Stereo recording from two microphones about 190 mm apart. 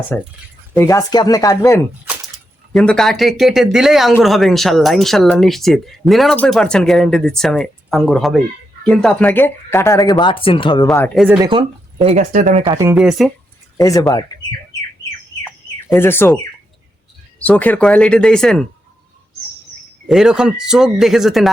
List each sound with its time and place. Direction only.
0.1 s speech: 10° left (ahead or behind)
2.7 s speech: centre (ahead or behind); by 10.8 s 25° left (ahead or behind)
11.1 s speech: centre (ahead or behind)
11.3 s speech: 25° right (ahead or behind)
12.1 s speech: 40° right (ahead or behind)
12.6 s speech: 15° right (ahead or behind)
13.0 s speech: centre (ahead or behind)
13.7 s speech: 20° left (ahead or behind)
15.9 s speech: 10° left (ahead or behind)
17.4 s speech: 10° left (ahead or behind)
20.1 s speech: 5° right (ahead or behind)